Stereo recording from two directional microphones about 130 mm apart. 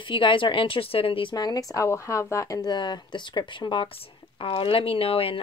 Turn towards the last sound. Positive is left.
turn(degrees=45)  # may be behind; listen again after turning